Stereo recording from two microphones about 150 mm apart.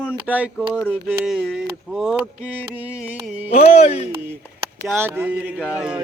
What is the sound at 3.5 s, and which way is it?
Speech, 45° left (ahead or behind).